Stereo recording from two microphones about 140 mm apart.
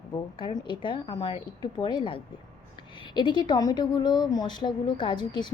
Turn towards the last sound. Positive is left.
turn(degrees=35)  # may be behind; listen again after turning